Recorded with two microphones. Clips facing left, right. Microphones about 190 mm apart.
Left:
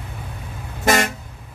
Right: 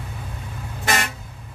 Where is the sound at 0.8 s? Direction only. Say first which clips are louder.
Left 6 dB; 45° left (ahead or behind).